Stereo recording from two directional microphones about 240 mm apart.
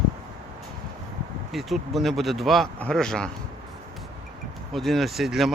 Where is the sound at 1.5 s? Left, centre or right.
Centre.